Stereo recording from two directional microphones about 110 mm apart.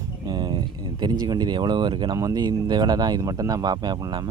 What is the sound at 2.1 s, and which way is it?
Speech, 35° right (ahead or behind).